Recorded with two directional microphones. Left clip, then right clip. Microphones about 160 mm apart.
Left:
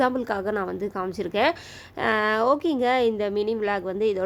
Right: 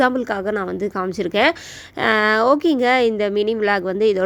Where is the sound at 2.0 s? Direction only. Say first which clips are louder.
Right 6 dB; 30° right (ahead or behind).